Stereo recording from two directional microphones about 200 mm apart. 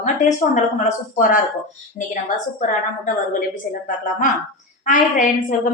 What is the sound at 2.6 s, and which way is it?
Speech, 40° left (ahead or behind).